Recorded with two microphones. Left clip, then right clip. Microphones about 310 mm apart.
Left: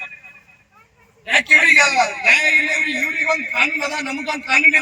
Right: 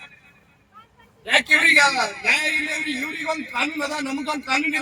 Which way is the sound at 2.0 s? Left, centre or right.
Left.